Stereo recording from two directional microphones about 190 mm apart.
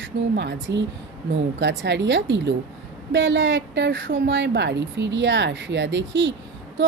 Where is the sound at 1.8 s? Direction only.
70° right (ahead or behind).